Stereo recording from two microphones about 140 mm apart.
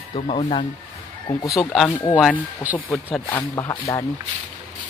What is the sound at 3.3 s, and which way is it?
Speech, 20° left (ahead or behind).